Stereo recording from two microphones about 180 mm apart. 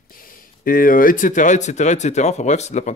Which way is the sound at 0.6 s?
50° left (ahead or behind).